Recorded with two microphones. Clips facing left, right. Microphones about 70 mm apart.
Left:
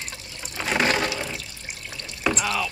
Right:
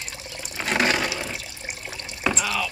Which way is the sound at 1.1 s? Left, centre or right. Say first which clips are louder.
Even; centre.